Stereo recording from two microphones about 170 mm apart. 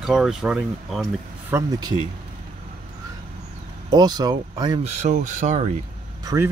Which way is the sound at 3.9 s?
25° right (ahead or behind).